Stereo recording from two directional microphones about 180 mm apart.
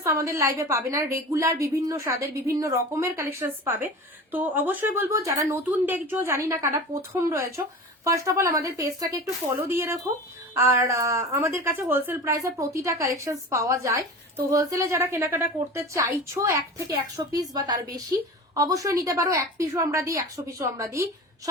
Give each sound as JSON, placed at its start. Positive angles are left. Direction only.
{"t": 0.0, "sound": "a woman's voice", "side_deg": -15}
{"t": 18.5, "sound": "a woman's voice", "side_deg": -20}